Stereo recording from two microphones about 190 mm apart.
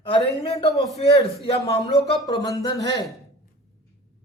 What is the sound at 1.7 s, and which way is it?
A man's voice, 20° left (ahead or behind).